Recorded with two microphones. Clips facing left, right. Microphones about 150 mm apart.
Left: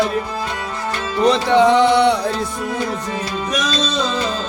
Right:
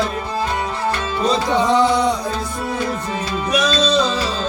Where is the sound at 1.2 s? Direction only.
70° left (ahead or behind).